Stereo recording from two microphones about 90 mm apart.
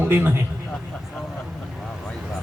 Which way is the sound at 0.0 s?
20° right (ahead or behind).